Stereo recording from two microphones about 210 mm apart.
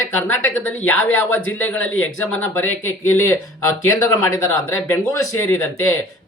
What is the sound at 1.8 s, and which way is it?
Speech, 70° left (ahead or behind).